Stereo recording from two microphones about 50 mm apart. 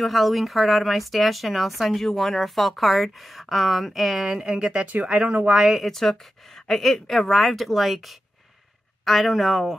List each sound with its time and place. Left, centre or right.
0.0 s speech: centre; by 5.6 s right
5.7 s speech: centre